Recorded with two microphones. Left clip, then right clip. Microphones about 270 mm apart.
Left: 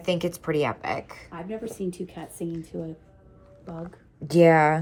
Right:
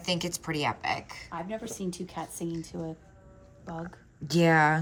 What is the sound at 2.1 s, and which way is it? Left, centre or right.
Speech, centre.